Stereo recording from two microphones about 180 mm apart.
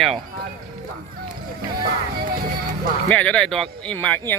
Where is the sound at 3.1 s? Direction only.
5° left (ahead or behind).